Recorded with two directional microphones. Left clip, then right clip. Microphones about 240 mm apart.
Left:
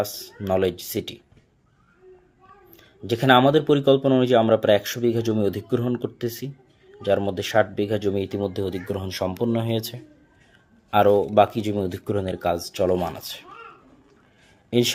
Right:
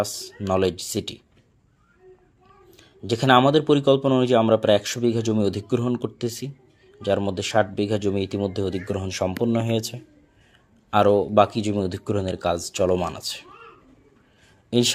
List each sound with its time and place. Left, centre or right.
0.0 s speech: centre
2.7 s speech: centre
14.7 s speech: centre